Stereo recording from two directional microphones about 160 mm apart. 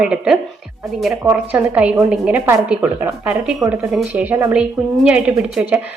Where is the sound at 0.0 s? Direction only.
5° right (ahead or behind).